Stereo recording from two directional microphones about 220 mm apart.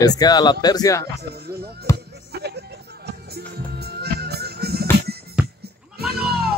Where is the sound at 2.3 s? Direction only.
50° right (ahead or behind).